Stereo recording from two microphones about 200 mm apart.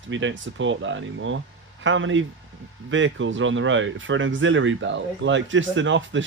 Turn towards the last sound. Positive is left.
turn(degrees=-70)  # may be behind; listen again after turning